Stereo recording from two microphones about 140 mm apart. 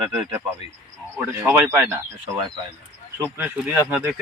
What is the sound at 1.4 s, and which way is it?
Speech, 15° right (ahead or behind).